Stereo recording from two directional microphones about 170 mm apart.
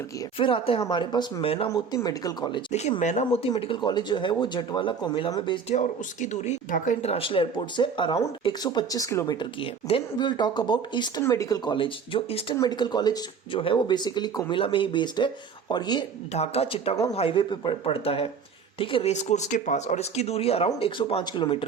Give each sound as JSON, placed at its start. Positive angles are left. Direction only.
{"t": 0.3, "sound": "speech", "side_deg": 30}
{"t": 1.7, "sound": "speech", "side_deg": 20}
{"t": 3.0, "sound": "speech", "side_deg": 45}
{"t": 3.5, "sound": "speech", "side_deg": 30}
{"t": 5.7, "sound": "speech", "side_deg": 45}
{"t": 16.3, "sound": "speech", "side_deg": 35}